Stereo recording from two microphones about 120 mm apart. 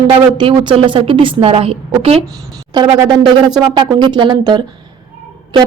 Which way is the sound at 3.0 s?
35° right (ahead or behind).